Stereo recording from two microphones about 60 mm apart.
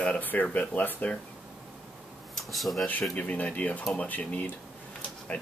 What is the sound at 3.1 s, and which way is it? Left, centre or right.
Speech, left.